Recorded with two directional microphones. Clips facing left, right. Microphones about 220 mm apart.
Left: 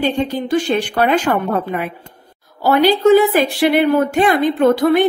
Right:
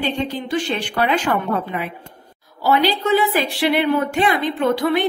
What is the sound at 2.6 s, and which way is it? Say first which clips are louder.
A woman's voice: left 6 dB; 50° left (ahead or behind).